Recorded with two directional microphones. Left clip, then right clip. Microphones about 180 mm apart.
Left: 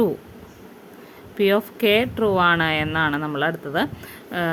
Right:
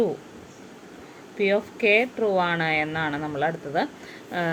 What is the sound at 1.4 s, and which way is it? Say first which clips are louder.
Speech: left 3 dB; 40° left (ahead or behind).